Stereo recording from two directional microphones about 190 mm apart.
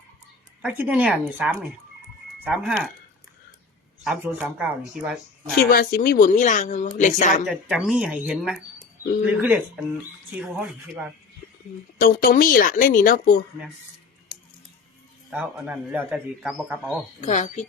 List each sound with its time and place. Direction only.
0.8 s speech: 5° right (ahead or behind)
4.0 s speech: 5° right (ahead or behind)
5.7 s speech: 50° left (ahead or behind)
7.4 s speech: 5° right (ahead or behind)
11.9 s speech: 50° left (ahead or behind)
15.3 s speech: 5° right (ahead or behind)
17.2 s speech: 40° left (ahead or behind)